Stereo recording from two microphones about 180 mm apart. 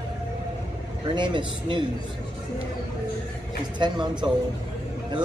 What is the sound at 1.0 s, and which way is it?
Speech, 25° right (ahead or behind).